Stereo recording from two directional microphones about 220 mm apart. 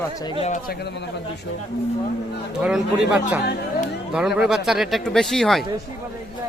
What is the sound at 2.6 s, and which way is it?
Speech, centre (ahead or behind).